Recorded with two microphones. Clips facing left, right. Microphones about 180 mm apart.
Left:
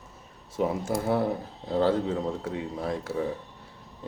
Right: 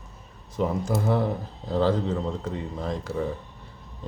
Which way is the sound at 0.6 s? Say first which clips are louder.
Right 1 dB; 5° left (ahead or behind).